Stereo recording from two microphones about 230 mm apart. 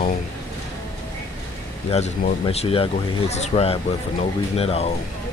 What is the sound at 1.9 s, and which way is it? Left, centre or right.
Speech, left.